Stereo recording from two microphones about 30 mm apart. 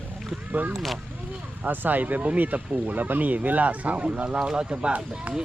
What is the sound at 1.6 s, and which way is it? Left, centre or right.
Speech, right.